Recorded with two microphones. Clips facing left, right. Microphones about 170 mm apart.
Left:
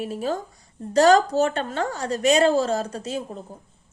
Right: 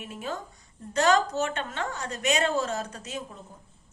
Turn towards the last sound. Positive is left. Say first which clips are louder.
# left 8 dB
turn(degrees=30)  # may be behind; listen again after turning